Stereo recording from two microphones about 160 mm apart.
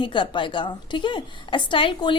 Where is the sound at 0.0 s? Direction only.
30° left (ahead or behind).